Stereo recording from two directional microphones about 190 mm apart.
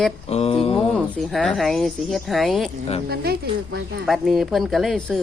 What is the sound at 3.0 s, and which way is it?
Speech, 55° right (ahead or behind).